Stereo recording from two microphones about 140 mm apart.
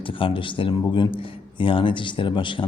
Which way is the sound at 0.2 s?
40° left (ahead or behind).